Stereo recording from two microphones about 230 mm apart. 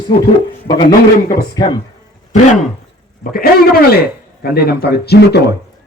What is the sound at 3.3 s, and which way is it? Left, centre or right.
A man's voice, left.